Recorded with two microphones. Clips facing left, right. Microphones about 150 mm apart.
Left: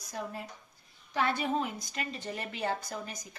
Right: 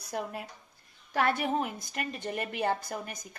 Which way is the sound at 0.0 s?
65° right (ahead or behind).